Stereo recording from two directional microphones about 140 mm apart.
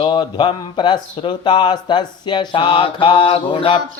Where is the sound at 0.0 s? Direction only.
35° left (ahead or behind).